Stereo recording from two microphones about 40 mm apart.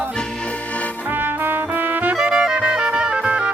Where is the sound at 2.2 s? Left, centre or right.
Right.